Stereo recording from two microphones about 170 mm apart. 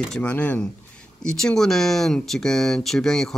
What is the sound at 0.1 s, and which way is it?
Speech, 5° left (ahead or behind).